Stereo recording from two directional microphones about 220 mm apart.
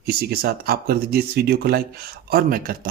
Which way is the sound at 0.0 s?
45° right (ahead or behind).